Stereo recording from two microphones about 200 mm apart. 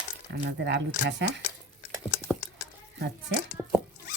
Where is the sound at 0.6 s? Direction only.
60° right (ahead or behind).